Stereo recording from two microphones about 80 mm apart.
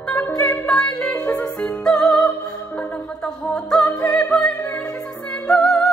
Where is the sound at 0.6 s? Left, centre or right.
Centre.